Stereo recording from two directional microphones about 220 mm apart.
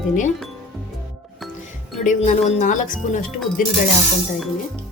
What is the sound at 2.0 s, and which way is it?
Speech, 35° left (ahead or behind).